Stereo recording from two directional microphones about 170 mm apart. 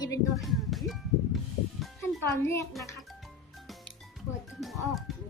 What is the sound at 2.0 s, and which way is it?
Speech, 15° left (ahead or behind).